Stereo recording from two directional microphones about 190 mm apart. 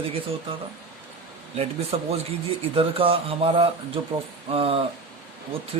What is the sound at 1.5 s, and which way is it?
Speech, 35° right (ahead or behind).